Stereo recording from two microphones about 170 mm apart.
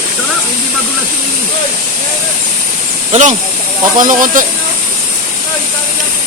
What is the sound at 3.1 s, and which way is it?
Speech, 45° right (ahead or behind).